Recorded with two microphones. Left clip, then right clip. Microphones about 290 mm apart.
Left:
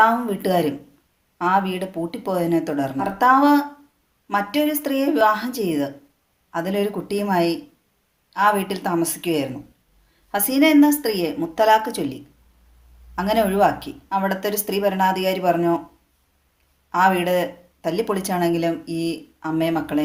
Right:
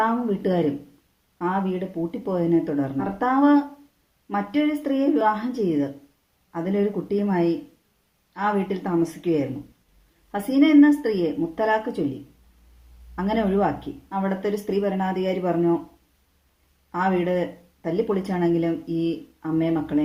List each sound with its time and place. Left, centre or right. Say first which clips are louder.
0.0 s speech: left 6 dB; left
13.1 s speech: left 5 dB; left
16.9 s speech: left 6 dB; left